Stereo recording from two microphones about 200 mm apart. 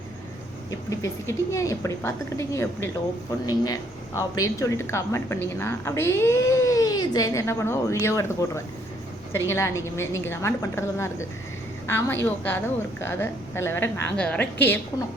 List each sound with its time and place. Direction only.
0.7 s a woman's voice: 15° left (ahead or behind)